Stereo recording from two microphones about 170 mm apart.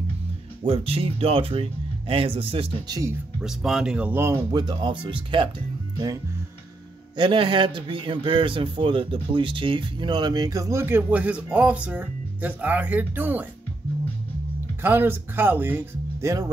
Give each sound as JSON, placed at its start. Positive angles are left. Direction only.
{"t": 0.7, "sound": "speech", "side_deg": -35}
{"t": 3.3, "sound": "speech", "side_deg": -5}
{"t": 4.5, "sound": "a man's voice", "side_deg": -25}
{"t": 7.2, "sound": "a man's voice", "side_deg": -30}
{"t": 14.8, "sound": "speech", "side_deg": -10}